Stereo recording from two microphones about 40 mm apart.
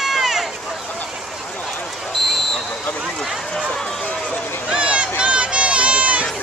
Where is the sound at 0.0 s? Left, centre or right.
Centre.